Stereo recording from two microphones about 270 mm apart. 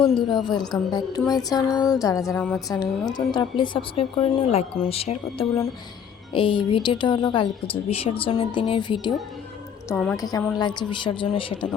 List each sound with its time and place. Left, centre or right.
0.3 s a woman's voice: centre